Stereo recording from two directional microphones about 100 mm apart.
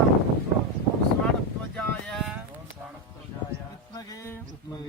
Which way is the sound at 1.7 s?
5° left (ahead or behind).